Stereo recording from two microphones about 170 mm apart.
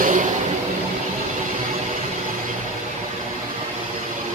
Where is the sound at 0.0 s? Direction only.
50° right (ahead or behind).